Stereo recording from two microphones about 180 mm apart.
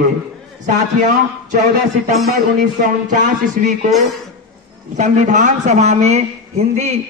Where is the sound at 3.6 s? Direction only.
50° right (ahead or behind).